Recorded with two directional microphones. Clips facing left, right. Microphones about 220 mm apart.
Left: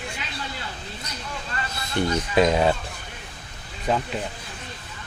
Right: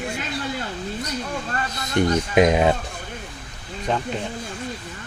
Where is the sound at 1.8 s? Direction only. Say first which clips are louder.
Right 4 dB; 20° right (ahead or behind).